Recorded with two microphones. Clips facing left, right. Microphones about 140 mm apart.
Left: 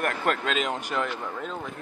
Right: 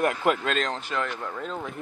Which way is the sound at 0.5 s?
10° left (ahead or behind).